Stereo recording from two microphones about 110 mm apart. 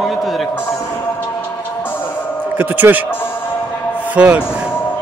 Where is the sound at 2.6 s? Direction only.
15° right (ahead or behind).